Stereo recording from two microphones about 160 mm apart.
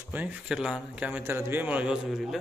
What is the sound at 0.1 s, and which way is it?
A man's voice, 10° right (ahead or behind).